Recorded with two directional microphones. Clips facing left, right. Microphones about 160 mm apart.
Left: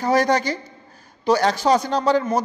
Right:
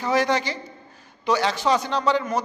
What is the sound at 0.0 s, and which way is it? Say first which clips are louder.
A man's voice: left 3 dB; 40° left (ahead or behind).